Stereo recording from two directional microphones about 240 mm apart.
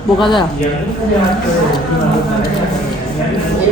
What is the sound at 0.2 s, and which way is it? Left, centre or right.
Speech, centre.